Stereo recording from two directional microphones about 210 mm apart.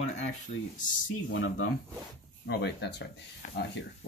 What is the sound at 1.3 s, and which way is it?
Speech, 70° left (ahead or behind).